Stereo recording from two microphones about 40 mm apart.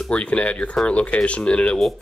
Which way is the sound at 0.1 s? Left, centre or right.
Left.